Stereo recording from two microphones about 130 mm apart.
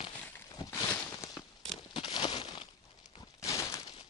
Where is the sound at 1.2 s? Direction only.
20° left (ahead or behind).